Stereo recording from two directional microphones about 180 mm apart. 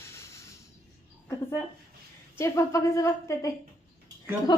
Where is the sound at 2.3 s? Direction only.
15° left (ahead or behind).